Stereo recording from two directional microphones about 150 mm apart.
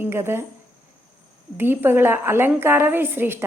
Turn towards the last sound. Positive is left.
turn(degrees=-15)  # may be behind; listen again after turning